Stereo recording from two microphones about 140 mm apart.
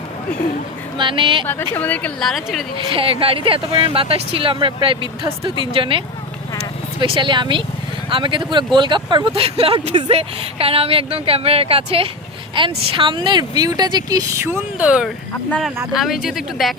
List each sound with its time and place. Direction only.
0.9 s speech: 35° right (ahead or behind)
1.7 s a woman's voice: 10° left (ahead or behind)
2.9 s speech: 40° right (ahead or behind)
7.0 s speech: 35° right (ahead or behind); by 14.8 s 20° right (ahead or behind)
14.8 s speech: 10° right (ahead or behind)